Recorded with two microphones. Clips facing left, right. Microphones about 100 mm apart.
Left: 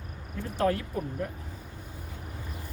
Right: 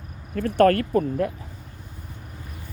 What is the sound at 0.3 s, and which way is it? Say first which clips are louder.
Speech: right 10 dB; 75° right (ahead or behind).